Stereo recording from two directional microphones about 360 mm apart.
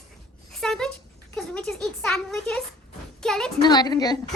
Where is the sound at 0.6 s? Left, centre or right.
Centre.